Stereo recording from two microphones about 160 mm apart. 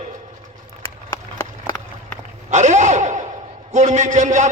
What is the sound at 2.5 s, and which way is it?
A man's voice, 50° right (ahead or behind).